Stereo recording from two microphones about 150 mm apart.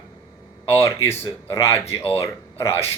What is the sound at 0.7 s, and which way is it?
Speech, 15° left (ahead or behind).